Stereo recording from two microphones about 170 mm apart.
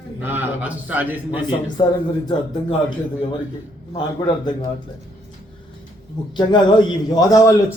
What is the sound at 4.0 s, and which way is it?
Speech, 25° left (ahead or behind).